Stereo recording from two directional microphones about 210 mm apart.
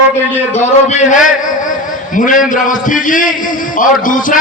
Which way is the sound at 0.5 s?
35° left (ahead or behind).